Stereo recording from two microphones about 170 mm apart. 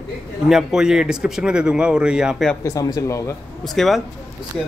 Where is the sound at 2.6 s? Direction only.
20° left (ahead or behind).